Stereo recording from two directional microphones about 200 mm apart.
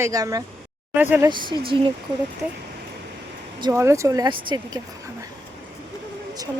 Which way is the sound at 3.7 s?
15° right (ahead or behind).